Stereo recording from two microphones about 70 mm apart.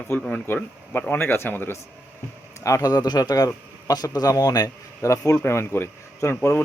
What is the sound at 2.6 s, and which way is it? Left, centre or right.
A man's voice, left.